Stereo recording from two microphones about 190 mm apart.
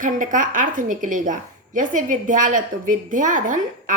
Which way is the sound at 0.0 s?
45° right (ahead or behind).